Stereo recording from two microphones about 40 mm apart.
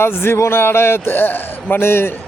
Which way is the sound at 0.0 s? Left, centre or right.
Left.